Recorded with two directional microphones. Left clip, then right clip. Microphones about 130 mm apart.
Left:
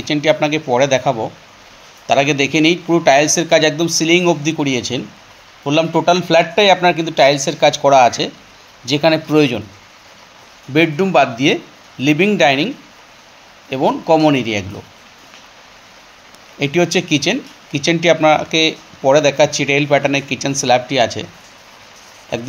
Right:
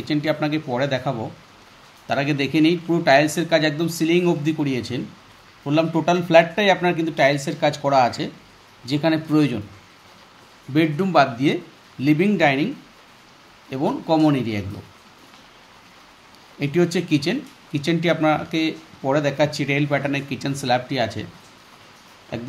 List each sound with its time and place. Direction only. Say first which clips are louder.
0.0 s speech: left 8 dB; 35° left (ahead or behind)
10.7 s speech: left 6 dB; 35° left (ahead or behind)
13.7 s speech: left 8 dB; 35° left (ahead or behind)
16.5 s speech: left 6 dB; 35° left (ahead or behind)
22.3 s speech: left 9 dB; 35° left (ahead or behind)